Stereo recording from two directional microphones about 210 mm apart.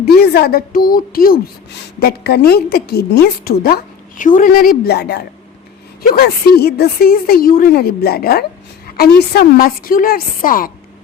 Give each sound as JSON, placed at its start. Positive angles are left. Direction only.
{"t": 0.0, "sound": "speech", "side_deg": 50}